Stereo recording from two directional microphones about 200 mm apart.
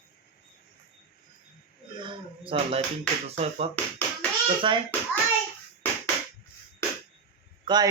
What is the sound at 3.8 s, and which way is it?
Speech, 10° left (ahead or behind).